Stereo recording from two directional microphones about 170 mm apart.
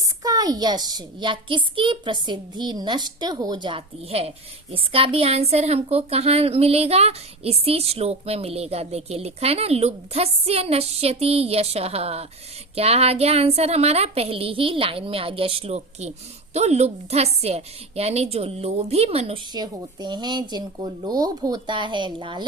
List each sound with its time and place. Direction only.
0.0 s a woman's voice: 20° right (ahead or behind); by 19.4 s 35° right (ahead or behind)
19.5 s a woman's voice: 25° right (ahead or behind)